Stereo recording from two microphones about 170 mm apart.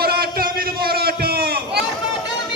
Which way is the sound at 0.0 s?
65° right (ahead or behind).